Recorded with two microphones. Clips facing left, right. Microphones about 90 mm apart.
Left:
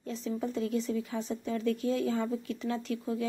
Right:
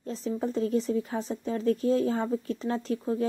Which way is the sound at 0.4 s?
35° right (ahead or behind).